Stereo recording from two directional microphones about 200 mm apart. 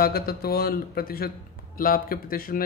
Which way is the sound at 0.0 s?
50° left (ahead or behind).